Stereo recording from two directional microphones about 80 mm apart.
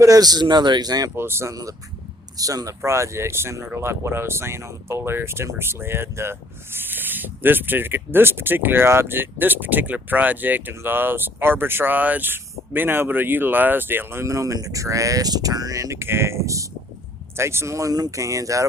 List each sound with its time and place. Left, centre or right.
0.0 s a man's voice: right
1.1 s speech: right
2.4 s speech: right
16.0 s speech: right